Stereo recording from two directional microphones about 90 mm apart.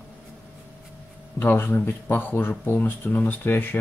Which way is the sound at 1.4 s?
25° left (ahead or behind).